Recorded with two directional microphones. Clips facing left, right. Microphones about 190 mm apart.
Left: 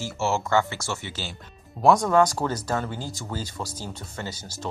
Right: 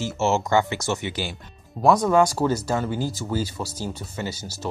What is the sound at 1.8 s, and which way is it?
Speech, centre (ahead or behind).